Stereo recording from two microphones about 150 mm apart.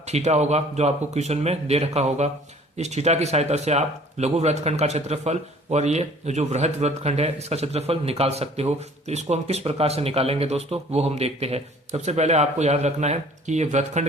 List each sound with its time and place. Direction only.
0.1 s speech: 45° right (ahead or behind)